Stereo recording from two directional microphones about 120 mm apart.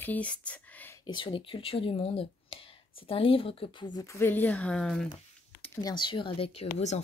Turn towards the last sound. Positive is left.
turn(degrees=50)  # may be behind; listen again after turning